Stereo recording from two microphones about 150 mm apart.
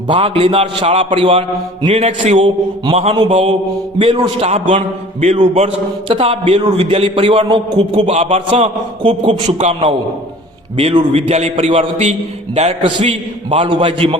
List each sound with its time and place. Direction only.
0.1 s a man's voice: 40° right (ahead or behind)
9.6 s a man's voice: 50° right (ahead or behind)
10.8 s a man's voice: 40° right (ahead or behind)